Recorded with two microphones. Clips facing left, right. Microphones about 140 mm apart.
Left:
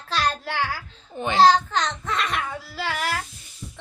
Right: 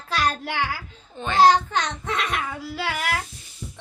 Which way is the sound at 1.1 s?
10° left (ahead or behind).